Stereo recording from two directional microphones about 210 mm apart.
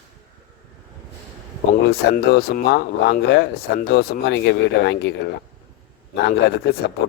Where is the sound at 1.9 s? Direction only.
50° left (ahead or behind).